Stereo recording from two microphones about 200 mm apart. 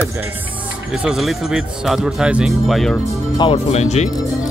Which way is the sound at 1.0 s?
Centre (ahead or behind).